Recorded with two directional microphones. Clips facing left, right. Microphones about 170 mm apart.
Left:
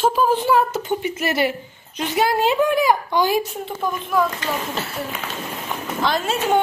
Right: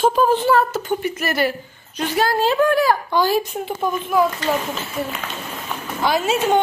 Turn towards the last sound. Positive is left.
turn(degrees=-10)  # may be behind; listen again after turning